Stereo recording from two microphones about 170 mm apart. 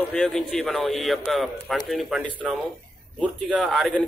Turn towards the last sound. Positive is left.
turn(degrees=0)  # may be behind; listen again after turning